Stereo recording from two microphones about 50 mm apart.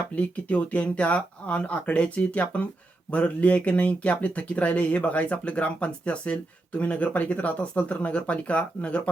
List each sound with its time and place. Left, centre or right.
0.2 s speech: left